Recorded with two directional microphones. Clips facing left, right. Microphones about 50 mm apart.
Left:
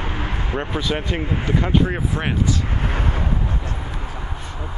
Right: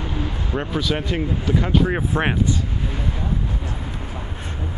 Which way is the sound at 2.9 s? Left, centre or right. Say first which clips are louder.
Left 3 dB; left.